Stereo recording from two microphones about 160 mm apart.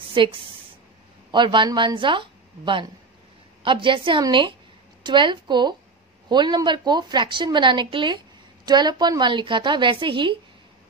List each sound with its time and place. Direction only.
0.1 s a woman's voice: 30° right (ahead or behind)